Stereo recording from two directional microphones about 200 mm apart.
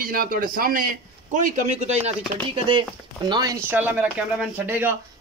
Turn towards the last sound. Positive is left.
turn(degrees=-10)  # may be behind; listen again after turning